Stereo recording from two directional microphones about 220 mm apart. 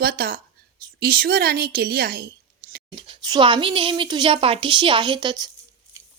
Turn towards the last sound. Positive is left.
turn(degrees=-20)  # may be behind; listen again after turning